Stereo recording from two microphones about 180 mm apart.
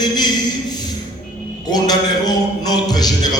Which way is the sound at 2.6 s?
20° left (ahead or behind).